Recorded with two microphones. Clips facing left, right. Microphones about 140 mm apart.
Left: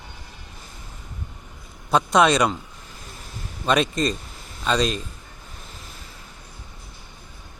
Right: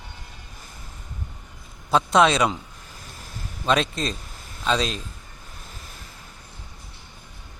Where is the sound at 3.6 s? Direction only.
Centre (ahead or behind).